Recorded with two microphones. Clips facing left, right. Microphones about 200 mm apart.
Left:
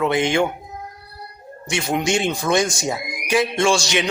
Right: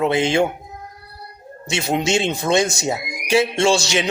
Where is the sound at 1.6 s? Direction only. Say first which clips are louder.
Right 1 dB; 25° right (ahead or behind).